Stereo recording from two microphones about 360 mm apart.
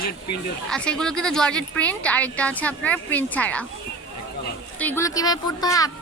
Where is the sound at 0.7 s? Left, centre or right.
Centre.